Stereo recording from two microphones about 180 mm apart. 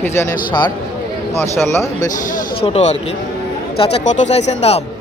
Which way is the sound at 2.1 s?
40° left (ahead or behind).